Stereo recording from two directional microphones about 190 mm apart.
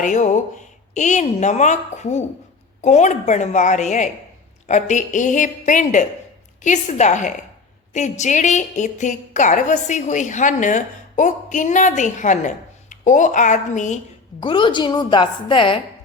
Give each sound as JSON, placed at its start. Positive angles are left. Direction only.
{"t": 0.0, "sound": "a woman's voice", "side_deg": 40}
{"t": 14.4, "sound": "a woman's voice", "side_deg": 25}